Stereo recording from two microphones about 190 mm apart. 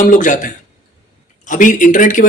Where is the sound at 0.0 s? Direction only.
45° left (ahead or behind).